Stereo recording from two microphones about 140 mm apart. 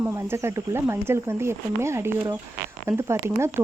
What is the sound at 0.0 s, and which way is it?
Speech, 20° right (ahead or behind).